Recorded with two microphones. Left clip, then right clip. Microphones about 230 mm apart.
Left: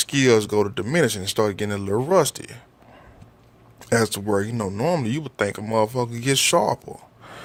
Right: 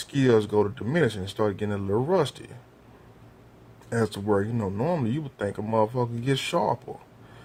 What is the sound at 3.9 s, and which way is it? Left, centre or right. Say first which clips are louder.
Speech: left 5 dB; left.